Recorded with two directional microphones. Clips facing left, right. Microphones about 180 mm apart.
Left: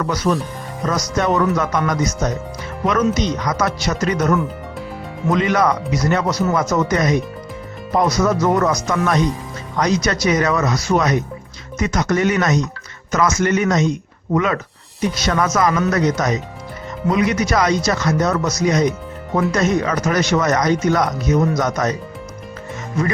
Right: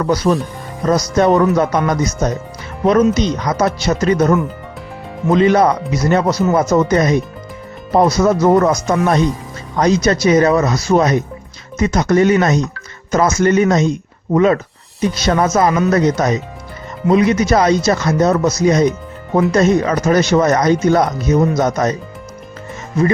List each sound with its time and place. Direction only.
0.0 s speech: 30° right (ahead or behind)